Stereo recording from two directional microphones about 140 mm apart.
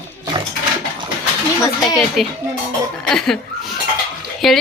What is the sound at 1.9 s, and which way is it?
Speech, centre (ahead or behind).